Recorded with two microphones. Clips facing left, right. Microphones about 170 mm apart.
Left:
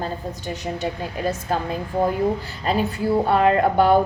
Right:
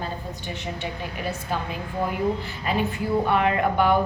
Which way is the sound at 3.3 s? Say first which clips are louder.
Left 6 dB; 35° left (ahead or behind).